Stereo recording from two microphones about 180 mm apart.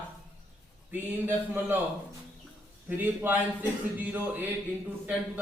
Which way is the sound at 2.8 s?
10° right (ahead or behind).